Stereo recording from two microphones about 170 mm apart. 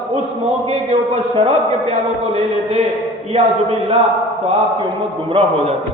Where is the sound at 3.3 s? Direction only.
30° right (ahead or behind).